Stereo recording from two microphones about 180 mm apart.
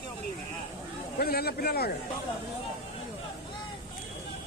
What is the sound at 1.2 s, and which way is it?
Speech, 60° left (ahead or behind).